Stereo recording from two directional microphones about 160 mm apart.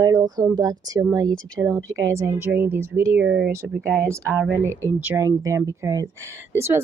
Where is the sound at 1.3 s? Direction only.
5° left (ahead or behind).